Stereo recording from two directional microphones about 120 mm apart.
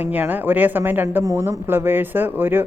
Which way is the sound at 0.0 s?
15° right (ahead or behind).